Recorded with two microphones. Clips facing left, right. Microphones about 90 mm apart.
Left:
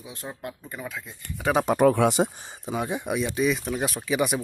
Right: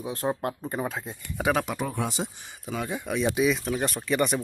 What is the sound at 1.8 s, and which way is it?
Speech, 80° left.